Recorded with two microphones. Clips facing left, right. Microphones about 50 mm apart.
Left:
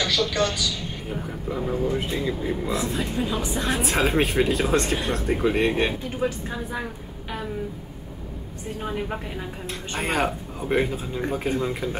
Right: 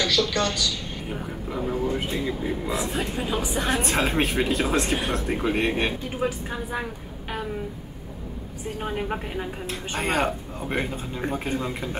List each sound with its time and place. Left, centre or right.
0.0 s speech: centre
1.0 s a woman's voice: centre
3.6 s speech: centre
6.0 s a woman's voice: centre
8.7 s a woman's voice: centre
9.9 s speech: centre